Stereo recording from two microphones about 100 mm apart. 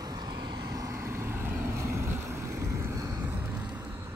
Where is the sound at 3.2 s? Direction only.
20° right (ahead or behind).